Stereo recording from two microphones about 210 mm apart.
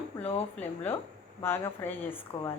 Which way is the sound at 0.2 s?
30° left (ahead or behind).